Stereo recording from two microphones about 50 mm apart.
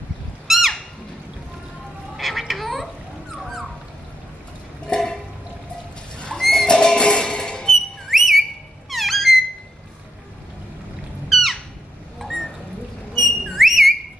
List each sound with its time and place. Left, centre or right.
0.5 s music: centre
2.1 s a sound: centre
4.8 s a sound: centre
6.4 s music: centre
7.7 s whistle: centre
8.9 s squeak: centre
11.2 s a sound: centre
12.2 s bird: centre
13.1 s whistle: centre